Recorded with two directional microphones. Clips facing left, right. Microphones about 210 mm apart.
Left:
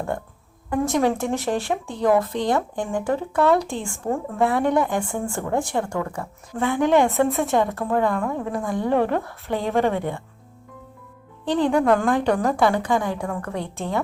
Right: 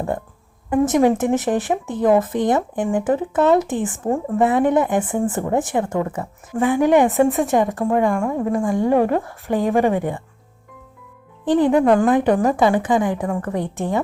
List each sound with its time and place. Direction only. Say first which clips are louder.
0.7 s speech: right 5 dB; 20° right (ahead or behind)
7.3 s a woman's voice: right 4 dB; centre (ahead or behind)
7.5 s a woman's voice: right 3 dB; 15° right (ahead or behind)
11.8 s a woman's voice: right 4 dB; 15° right (ahead or behind)